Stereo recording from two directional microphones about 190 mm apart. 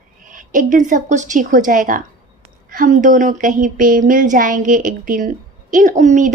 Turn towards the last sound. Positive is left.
turn(degrees=-40)  # may be behind; listen again after turning